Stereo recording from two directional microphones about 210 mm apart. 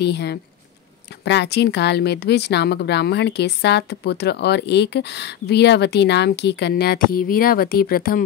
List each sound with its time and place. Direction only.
0.0 s speech: 50° left (ahead or behind)